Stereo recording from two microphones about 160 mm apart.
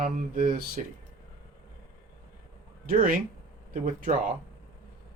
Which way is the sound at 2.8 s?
60° right (ahead or behind).